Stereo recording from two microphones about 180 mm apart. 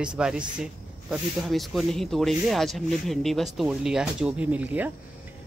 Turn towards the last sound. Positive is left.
turn(degrees=-10)  # may be behind; listen again after turning